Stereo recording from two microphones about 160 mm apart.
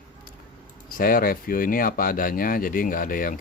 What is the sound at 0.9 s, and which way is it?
Speech, 65° left (ahead or behind).